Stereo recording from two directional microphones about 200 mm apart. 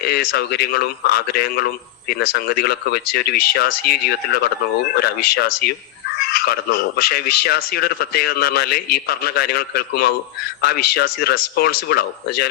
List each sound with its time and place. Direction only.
0.0 s a man's voice: 50° left (ahead or behind)